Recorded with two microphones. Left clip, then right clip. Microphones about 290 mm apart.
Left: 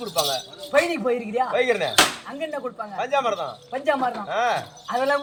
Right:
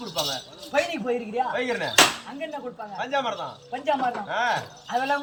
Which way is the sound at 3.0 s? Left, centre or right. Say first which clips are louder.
Left 4 dB; centre.